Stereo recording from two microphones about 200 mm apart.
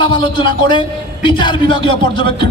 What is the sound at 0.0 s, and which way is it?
A man's voice, 25° left (ahead or behind).